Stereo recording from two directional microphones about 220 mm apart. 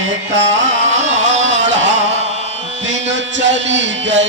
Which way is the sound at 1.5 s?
55° right (ahead or behind).